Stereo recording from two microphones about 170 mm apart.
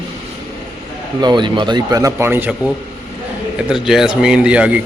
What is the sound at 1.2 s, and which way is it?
Speech, 25° right (ahead or behind).